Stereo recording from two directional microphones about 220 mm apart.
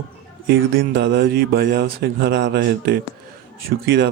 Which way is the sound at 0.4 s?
50° right (ahead or behind).